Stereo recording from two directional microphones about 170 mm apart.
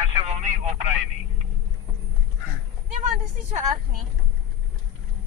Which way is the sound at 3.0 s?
45° right (ahead or behind).